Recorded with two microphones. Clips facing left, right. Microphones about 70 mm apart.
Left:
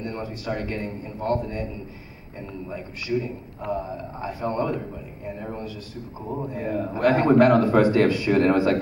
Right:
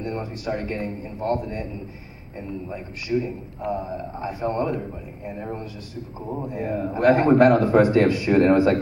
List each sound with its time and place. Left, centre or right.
0.0 s a man's voice: right
2.7 s a man's voice: right